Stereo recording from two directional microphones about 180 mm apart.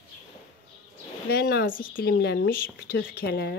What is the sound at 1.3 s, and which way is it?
Speech, 60° left (ahead or behind).